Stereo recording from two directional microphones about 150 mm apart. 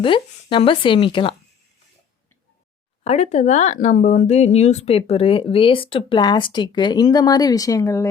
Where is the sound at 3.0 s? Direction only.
50° left (ahead or behind).